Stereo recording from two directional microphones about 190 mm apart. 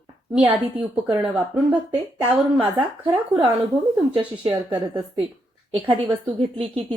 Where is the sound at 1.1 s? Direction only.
10° right (ahead or behind).